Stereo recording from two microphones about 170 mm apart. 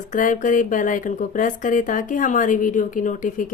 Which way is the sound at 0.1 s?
50° left (ahead or behind).